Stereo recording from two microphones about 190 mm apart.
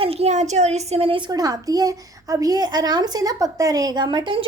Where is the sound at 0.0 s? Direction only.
30° right (ahead or behind).